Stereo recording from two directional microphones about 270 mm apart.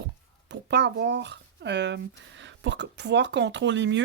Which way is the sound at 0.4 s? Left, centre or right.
Right.